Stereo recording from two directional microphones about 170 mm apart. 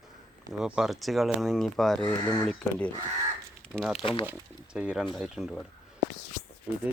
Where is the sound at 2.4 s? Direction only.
5° left (ahead or behind).